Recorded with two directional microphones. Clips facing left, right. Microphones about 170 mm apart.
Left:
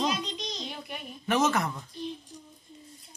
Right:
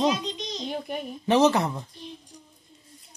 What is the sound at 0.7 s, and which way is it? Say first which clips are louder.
Speech: right 9 dB; 45° right (ahead or behind).